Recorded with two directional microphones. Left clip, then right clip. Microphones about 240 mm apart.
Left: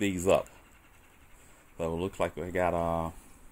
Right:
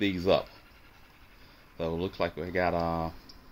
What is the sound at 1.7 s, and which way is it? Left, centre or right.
Speech, left.